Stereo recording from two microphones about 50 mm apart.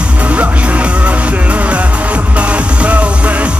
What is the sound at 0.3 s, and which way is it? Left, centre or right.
Music, right.